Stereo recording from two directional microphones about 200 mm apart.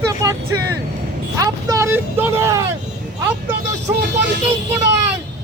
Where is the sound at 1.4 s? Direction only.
15° right (ahead or behind).